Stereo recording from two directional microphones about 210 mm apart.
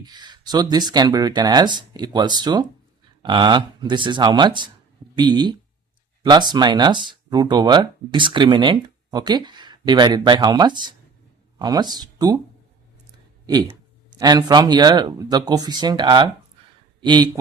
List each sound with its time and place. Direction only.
0.0 s speech: 20° right (ahead or behind)